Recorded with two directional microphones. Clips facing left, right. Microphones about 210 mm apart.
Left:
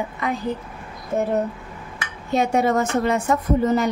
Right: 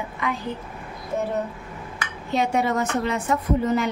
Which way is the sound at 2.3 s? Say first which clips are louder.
Left 3 dB; 45° left (ahead or behind).